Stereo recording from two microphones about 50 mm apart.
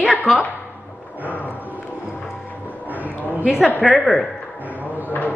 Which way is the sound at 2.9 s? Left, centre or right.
Right.